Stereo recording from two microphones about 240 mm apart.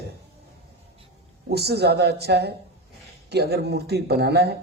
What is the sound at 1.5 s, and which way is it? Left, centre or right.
A man's voice, right.